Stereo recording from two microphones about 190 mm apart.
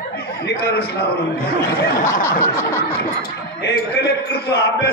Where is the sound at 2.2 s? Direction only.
15° left (ahead or behind).